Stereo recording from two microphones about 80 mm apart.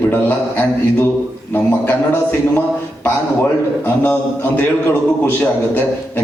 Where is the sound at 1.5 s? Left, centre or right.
Left.